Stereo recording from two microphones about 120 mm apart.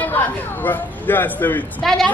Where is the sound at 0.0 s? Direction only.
15° left (ahead or behind).